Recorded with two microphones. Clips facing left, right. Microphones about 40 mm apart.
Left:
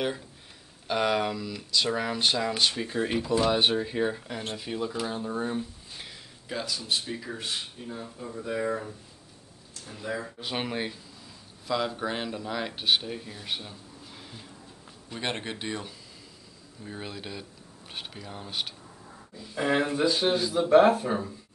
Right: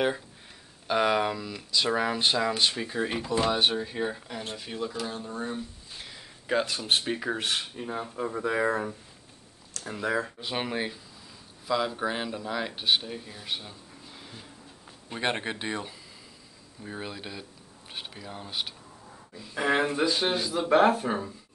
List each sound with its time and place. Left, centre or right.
0.8 s speech: centre
6.4 s speech: right
6.8 s speech: right
10.4 s speech: centre
15.1 s speech: centre
19.5 s a man's voice: right
20.5 s speech: right
21.0 s speech: centre